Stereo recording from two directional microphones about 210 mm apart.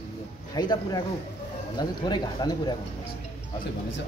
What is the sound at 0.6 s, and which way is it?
Speech, 20° left (ahead or behind).